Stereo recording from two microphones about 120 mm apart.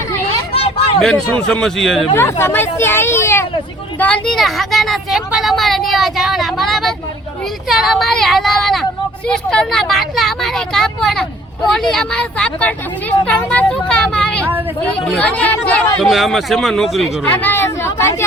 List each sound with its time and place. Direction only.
0.5 s a sound: 55° left (ahead or behind)
1.0 s speech: 10° left (ahead or behind)
2.1 s speech: 20° left (ahead or behind)
4.3 s speech: centre (ahead or behind)
16.0 s speech: centre (ahead or behind)
17.2 s speech: 15° left (ahead or behind)